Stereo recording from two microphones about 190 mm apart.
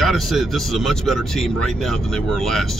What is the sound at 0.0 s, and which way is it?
Speech, centre (ahead or behind).